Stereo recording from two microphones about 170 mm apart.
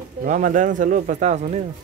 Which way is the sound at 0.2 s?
50° right (ahead or behind).